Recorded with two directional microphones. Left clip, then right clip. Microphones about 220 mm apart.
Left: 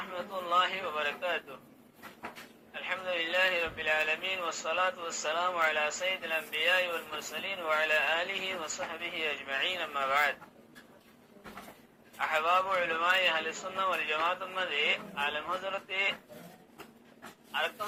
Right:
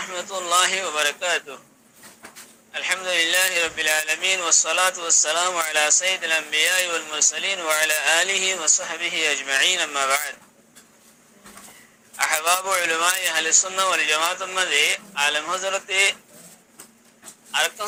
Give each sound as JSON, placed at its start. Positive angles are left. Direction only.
{"t": 0.0, "sound": "a man's voice", "side_deg": -65}
{"t": 2.7, "sound": "a man's voice", "side_deg": -60}
{"t": 12.1, "sound": "a man's voice", "side_deg": -60}
{"t": 17.5, "sound": "speech", "side_deg": -60}